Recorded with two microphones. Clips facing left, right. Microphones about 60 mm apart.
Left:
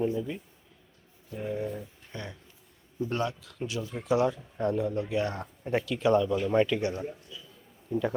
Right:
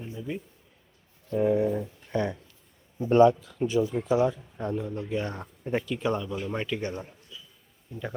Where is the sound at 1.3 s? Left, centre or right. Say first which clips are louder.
Right 9 dB; right.